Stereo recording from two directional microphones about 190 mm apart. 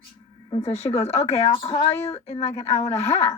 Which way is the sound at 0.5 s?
35° left (ahead or behind).